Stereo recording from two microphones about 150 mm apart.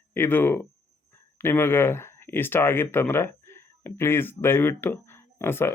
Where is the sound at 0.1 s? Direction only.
15° left (ahead or behind).